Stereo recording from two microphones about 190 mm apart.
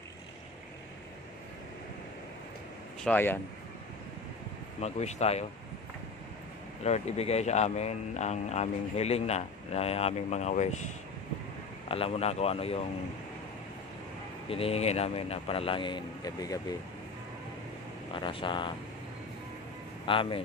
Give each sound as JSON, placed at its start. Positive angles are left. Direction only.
{"t": 3.0, "sound": "speech", "side_deg": 10}
{"t": 4.7, "sound": "speech", "side_deg": 35}
{"t": 6.8, "sound": "speech", "side_deg": 35}
{"t": 11.9, "sound": "speech", "side_deg": 30}
{"t": 14.5, "sound": "speech", "side_deg": 30}
{"t": 18.1, "sound": "speech", "side_deg": 25}
{"t": 20.1, "sound": "speech", "side_deg": 25}